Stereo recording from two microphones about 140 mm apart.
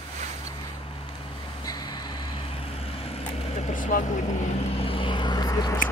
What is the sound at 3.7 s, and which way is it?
Vehicle, 65° left (ahead or behind).